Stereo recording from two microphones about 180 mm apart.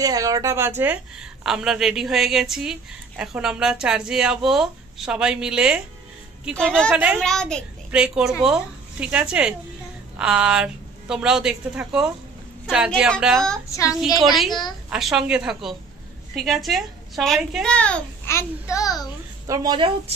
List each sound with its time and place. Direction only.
0.0 s a woman's voice: 20° right (ahead or behind); by 6.9 s 5° left (ahead or behind)
6.9 s a woman's voice: 5° right (ahead or behind)
7.2 s a child's voice: 5° left (ahead or behind)
13.7 s speech: 15° left (ahead or behind)
14.0 s a woman's voice: centre (ahead or behind)
14.5 s a woman's voice: 25° left (ahead or behind)
14.9 s a woman's voice: centre (ahead or behind); by 19.0 s 20° left (ahead or behind)
19.4 s speech: 20° right (ahead or behind)